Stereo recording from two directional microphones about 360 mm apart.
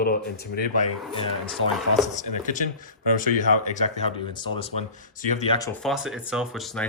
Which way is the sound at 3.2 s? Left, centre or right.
Centre.